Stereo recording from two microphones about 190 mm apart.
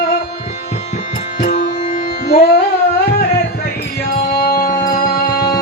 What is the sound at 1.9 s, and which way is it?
Music, 55° left (ahead or behind).